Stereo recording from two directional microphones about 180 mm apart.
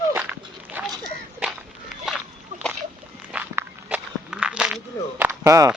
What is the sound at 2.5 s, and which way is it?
Splash, 40° right (ahead or behind).